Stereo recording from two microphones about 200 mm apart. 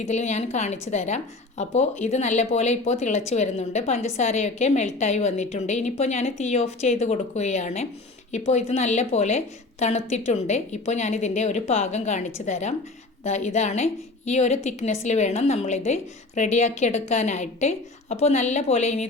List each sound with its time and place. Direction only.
0.1 s a woman's voice: 35° left (ahead or behind)